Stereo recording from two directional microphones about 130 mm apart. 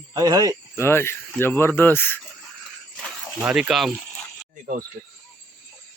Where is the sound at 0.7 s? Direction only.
20° left (ahead or behind).